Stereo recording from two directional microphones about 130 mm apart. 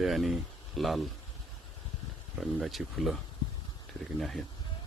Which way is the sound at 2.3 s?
Centre (ahead or behind).